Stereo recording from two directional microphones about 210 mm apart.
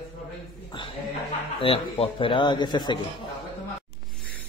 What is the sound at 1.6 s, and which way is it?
Speech, 25° left (ahead or behind).